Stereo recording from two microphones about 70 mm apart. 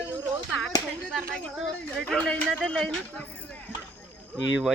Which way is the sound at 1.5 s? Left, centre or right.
Centre.